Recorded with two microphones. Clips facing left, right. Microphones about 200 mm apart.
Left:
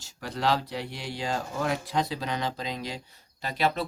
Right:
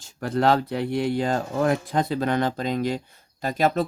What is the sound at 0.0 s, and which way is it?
Speech, 55° right (ahead or behind).